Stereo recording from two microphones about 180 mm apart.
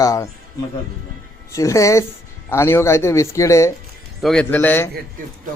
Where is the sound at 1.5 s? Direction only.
15° left (ahead or behind).